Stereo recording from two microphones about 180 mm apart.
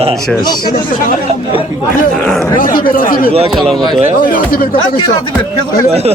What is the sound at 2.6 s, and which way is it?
Speech, 50° left (ahead or behind).